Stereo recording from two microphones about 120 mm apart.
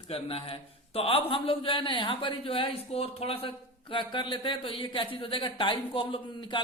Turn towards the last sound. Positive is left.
turn(degrees=45)  # may be behind; listen again after turning